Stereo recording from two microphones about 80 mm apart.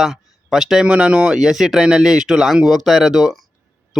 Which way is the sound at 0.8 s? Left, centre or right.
Centre.